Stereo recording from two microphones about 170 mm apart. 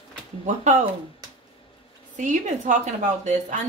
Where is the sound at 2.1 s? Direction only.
45° right (ahead or behind).